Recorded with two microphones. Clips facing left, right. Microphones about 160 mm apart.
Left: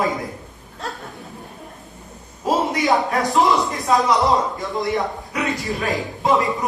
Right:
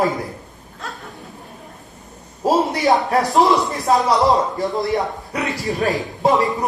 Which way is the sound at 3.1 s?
40° right (ahead or behind).